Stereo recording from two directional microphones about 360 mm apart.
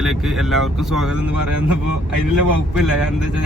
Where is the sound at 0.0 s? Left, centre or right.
Centre.